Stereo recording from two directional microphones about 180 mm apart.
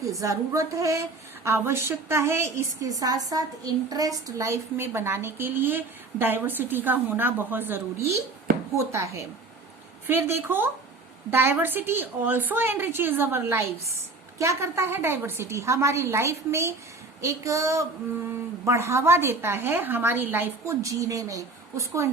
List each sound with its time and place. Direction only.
0.0 s a woman's voice: 20° right (ahead or behind)